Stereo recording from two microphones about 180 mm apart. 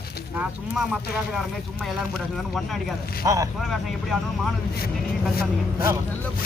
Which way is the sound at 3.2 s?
20° right (ahead or behind).